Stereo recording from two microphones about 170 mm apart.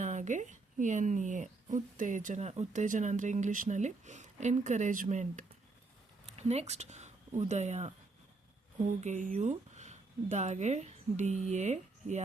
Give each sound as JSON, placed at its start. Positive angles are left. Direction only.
{"t": 0.0, "sound": "a woman's voice", "side_deg": -45}